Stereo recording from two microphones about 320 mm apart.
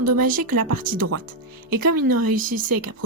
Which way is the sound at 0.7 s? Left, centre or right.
Right.